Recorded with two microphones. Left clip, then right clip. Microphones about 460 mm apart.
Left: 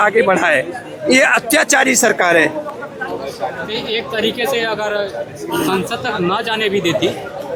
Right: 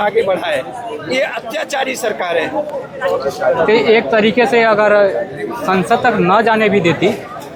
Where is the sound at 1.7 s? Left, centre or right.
Left.